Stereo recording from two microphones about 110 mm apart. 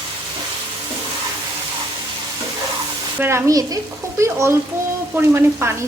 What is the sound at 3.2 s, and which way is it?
Sizzle, 25° right (ahead or behind).